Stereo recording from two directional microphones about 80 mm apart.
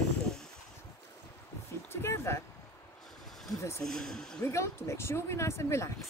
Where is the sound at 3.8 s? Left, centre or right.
Centre.